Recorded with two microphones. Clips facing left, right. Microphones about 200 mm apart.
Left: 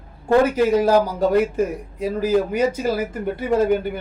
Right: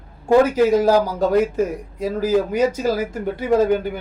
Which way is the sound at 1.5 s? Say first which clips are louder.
Right 1 dB; 10° right (ahead or behind).